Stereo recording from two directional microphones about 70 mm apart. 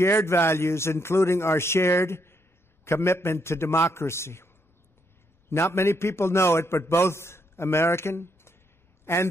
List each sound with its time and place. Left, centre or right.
0.0 s a man's voice: left
5.5 s a man's voice: left